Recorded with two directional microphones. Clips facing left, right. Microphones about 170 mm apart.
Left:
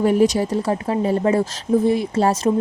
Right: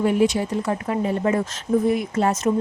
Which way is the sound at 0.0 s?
40° left (ahead or behind).